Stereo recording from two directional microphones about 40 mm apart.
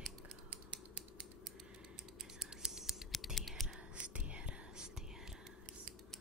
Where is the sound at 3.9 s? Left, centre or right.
Right.